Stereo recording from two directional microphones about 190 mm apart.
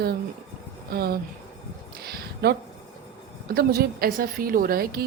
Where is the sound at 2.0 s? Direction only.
55° right (ahead or behind).